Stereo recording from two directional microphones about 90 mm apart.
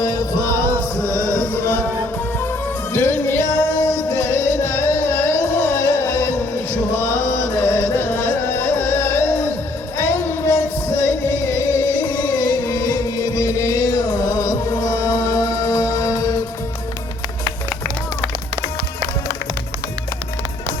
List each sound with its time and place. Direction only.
0.0 s music: 40° left (ahead or behind)
1.1 s music: 20° left (ahead or behind)
2.9 s music: 25° left (ahead or behind)
12.4 s music: 40° left (ahead or behind)